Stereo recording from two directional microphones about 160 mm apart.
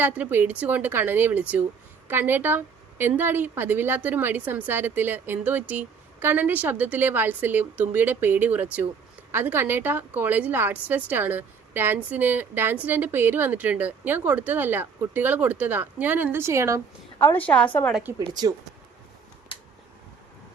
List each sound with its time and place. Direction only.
0.0 s a woman's voice: 10° right (ahead or behind)
17.2 s a woman's voice: 10° left (ahead or behind)
18.3 s speech: 25° right (ahead or behind)